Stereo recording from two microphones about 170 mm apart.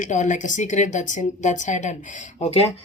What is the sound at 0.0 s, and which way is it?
Speech, 45° left (ahead or behind).